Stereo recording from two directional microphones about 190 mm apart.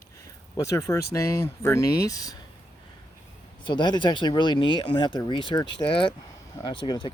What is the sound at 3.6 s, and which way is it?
Speech, 25° left (ahead or behind).